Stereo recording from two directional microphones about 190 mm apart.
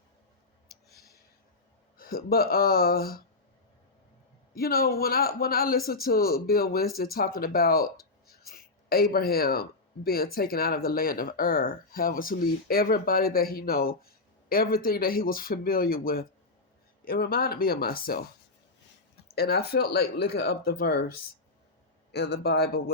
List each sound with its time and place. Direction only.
2.0 s speech: 50° left (ahead or behind)
4.5 s speech: 50° left (ahead or behind)
19.3 s speech: 55° left (ahead or behind)
22.1 s speech: 60° left (ahead or behind)